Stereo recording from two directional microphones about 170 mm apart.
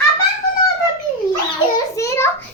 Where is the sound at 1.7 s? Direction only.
15° left (ahead or behind).